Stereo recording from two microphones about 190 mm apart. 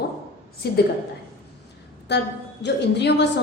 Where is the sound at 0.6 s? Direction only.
55° left (ahead or behind).